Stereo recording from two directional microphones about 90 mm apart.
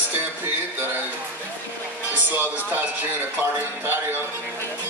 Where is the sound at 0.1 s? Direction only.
25° right (ahead or behind).